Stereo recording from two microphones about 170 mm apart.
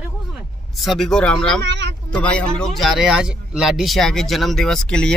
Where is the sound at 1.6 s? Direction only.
90° right.